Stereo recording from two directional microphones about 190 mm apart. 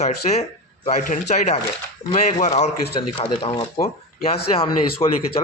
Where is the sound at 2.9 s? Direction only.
30° left (ahead or behind).